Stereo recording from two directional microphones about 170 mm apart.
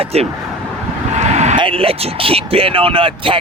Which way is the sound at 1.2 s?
40° right (ahead or behind).